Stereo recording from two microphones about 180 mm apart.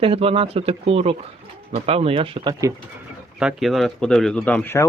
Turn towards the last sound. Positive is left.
turn(degrees=10)  # may be behind; listen again after turning